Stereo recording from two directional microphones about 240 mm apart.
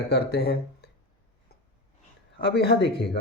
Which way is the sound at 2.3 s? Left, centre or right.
Left.